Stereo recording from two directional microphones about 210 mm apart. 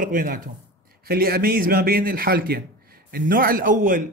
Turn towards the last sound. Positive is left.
turn(degrees=-40)  # may be behind; listen again after turning